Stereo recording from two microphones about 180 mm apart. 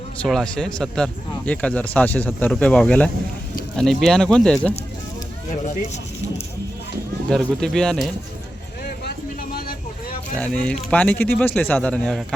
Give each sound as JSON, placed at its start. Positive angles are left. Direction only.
{"t": 0.2, "sound": "speech", "side_deg": 5}
{"t": 7.3, "sound": "speech", "side_deg": 5}
{"t": 8.8, "sound": "vehicle", "side_deg": 55}
{"t": 10.3, "sound": "speech", "side_deg": 5}